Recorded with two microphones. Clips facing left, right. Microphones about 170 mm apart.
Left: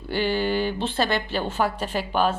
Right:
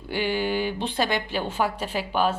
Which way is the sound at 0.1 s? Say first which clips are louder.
Left 2 dB; 10° right (ahead or behind).